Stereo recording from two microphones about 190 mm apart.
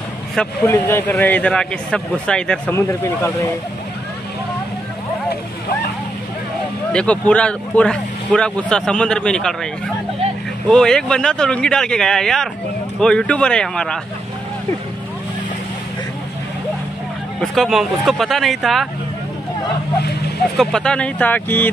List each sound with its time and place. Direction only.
0.4 s speech: 10° left (ahead or behind)
6.9 s speech: 5° left (ahead or behind)
10.7 s speech: 5° left (ahead or behind)
17.4 s speech: centre (ahead or behind)
20.0 s speech: 60° left (ahead or behind)
20.5 s speech: 5° left (ahead or behind)